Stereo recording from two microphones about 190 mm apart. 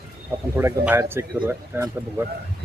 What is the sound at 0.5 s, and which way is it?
Speech, 10° right (ahead or behind).